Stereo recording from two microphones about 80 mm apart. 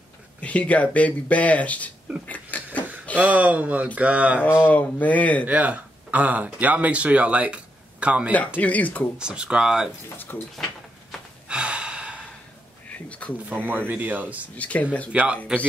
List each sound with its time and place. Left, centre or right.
0.4 s speech: centre
2.2 s a sound: centre
3.2 s speech: centre
4.5 s speech: left
5.5 s speech: centre
8.5 s speech: centre
9.2 s speech: centre
10.0 s speech: left
11.4 s gasp: centre
12.9 s a sound: centre
13.5 s speech: right
14.5 s speech: centre
15.1 s speech: centre